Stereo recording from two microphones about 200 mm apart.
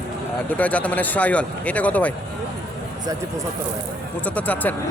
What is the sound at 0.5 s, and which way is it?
Speech, 5° left (ahead or behind).